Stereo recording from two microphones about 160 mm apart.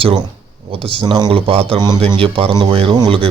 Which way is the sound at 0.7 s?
35° right (ahead or behind).